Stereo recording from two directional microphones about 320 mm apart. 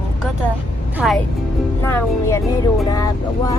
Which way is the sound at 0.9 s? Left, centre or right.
Centre.